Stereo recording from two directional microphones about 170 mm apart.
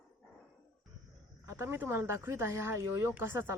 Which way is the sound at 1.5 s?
15° right (ahead or behind).